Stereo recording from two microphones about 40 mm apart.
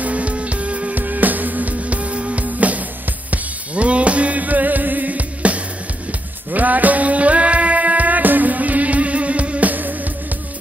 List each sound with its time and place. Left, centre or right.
0.0 s music: right